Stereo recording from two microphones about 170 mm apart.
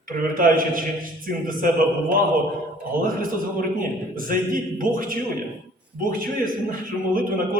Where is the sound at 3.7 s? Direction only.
55° right (ahead or behind).